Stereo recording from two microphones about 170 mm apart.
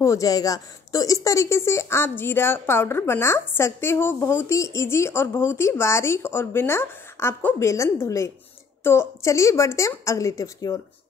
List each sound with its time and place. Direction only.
0.0 s speech: 20° left (ahead or behind)